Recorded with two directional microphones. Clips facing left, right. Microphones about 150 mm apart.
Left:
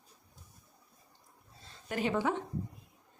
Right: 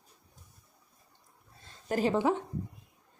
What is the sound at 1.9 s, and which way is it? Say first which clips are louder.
Speech: right 5 dB; 35° right (ahead or behind).